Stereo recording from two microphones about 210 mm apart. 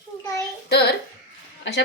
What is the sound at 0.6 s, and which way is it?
Child singing, 50° left (ahead or behind).